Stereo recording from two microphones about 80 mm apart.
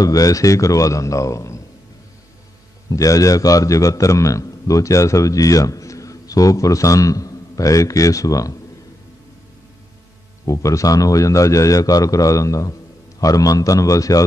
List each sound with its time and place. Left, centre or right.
0.0 s a man's voice: left
2.9 s a man's voice: left
10.4 s a man's voice: left